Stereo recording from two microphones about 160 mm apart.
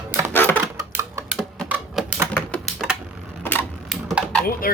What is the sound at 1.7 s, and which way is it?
Typewriter, 10° right (ahead or behind).